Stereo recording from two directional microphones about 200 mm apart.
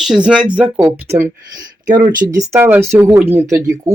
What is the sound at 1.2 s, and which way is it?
Speech, 20° right (ahead or behind).